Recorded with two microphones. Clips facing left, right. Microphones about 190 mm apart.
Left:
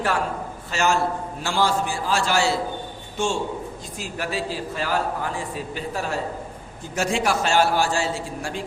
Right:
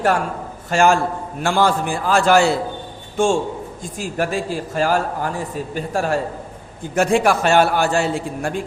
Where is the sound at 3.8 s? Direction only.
50° right (ahead or behind).